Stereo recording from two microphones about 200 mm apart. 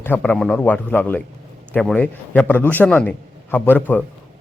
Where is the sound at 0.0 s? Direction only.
10° left (ahead or behind).